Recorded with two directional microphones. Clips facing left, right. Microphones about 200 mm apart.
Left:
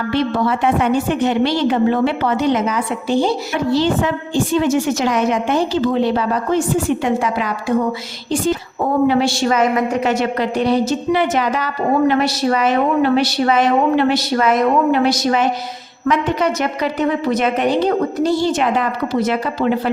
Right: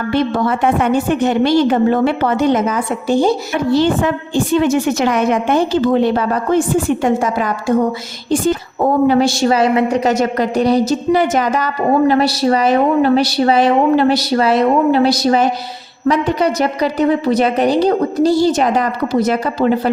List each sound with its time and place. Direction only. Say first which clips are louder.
0.1 s a woman's voice: right 2 dB; 50° right (ahead or behind)
9.0 s a woman's voice: right 3 dB; 45° right (ahead or behind)